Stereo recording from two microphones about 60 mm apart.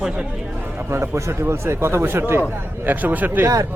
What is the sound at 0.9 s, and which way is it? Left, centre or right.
Speech, right.